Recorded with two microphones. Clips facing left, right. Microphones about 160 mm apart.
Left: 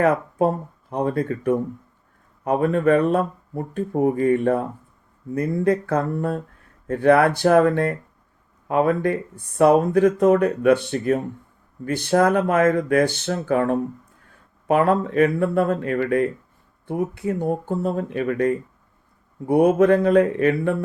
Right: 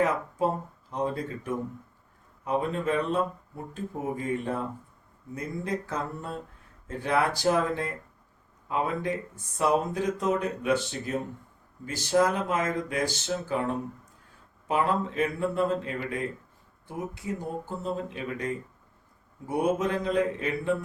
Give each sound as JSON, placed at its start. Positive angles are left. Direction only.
{"t": 0.0, "sound": "speech", "side_deg": 60}